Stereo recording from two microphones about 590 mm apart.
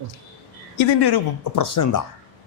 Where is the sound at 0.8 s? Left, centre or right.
Left.